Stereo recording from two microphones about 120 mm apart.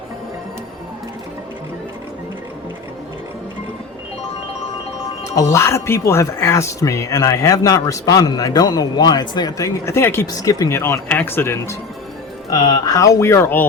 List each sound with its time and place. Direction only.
5.4 s speech: 25° left (ahead or behind)
12.5 s speech: 35° left (ahead or behind); by 13.7 s 15° left (ahead or behind)